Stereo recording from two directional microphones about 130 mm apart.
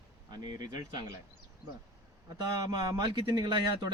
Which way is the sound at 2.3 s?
25° right (ahead or behind).